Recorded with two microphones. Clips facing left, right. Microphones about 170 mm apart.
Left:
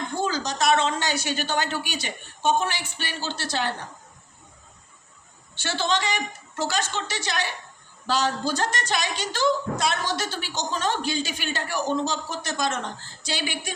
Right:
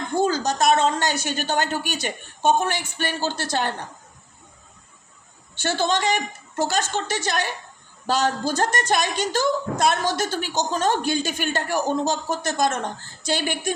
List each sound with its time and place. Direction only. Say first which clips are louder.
0.2 s a woman's voice: right 6 dB; 45° right (ahead or behind)
5.5 s a woman's voice: right 3 dB; 45° right (ahead or behind)